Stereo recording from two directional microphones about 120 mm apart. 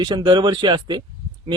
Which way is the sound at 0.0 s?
40° right (ahead or behind).